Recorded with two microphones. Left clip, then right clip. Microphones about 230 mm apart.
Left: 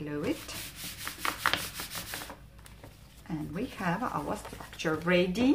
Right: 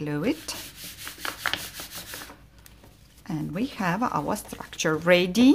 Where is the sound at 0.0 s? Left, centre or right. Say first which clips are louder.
Right 6 dB; right.